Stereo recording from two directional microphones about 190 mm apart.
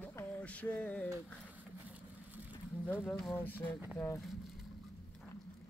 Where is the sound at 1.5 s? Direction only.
10° right (ahead or behind).